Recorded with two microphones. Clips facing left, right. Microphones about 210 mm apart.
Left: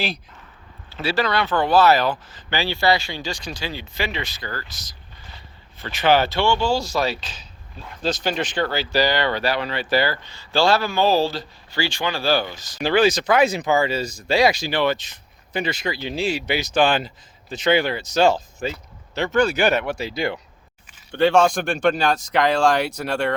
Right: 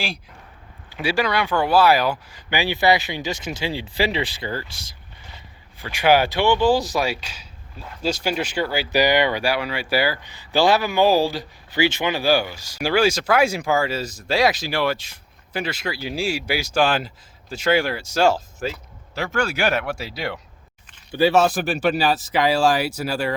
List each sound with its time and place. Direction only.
0.9 s speech: 15° right (ahead or behind)
5.8 s speech: 10° right (ahead or behind)